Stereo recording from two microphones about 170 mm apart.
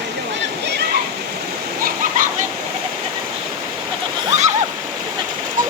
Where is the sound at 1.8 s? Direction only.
50° right (ahead or behind).